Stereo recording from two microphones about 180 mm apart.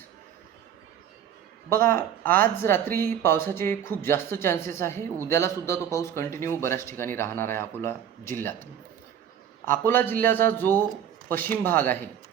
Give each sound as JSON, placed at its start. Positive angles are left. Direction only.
{"t": 1.7, "sound": "speech", "side_deg": 15}
{"t": 2.9, "sound": "speech", "side_deg": -55}
{"t": 3.2, "sound": "speech", "side_deg": 15}
{"t": 9.6, "sound": "speech", "side_deg": 15}